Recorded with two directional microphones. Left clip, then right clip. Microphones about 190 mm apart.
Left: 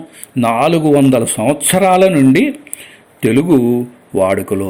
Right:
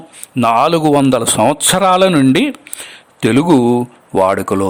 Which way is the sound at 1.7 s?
30° right (ahead or behind).